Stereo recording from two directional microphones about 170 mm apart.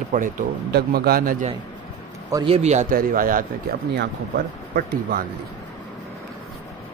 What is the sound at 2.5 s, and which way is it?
Speech, 40° right (ahead or behind).